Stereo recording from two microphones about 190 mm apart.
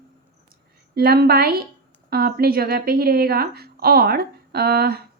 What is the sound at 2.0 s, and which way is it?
A woman's voice, 55° right (ahead or behind).